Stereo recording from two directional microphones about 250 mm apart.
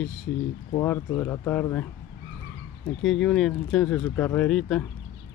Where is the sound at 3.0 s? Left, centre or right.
Centre.